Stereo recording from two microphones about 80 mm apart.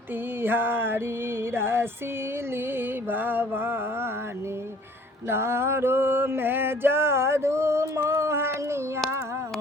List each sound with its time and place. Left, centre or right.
0.4 s music: right
5.3 s mantra: right